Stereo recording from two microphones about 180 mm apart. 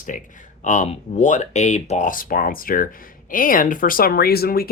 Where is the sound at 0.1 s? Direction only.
45° left (ahead or behind).